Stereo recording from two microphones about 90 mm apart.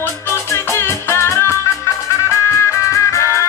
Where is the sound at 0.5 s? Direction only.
30° left (ahead or behind).